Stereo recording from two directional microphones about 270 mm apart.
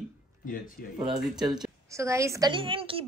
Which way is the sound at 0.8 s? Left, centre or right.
Left.